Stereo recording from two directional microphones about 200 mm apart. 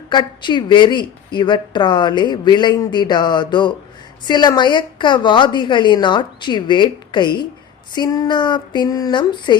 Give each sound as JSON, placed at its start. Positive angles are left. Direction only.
{"t": 0.1, "sound": "a woman's voice", "side_deg": 20}